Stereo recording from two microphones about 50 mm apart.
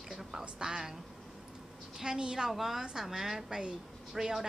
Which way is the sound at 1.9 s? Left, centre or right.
Centre.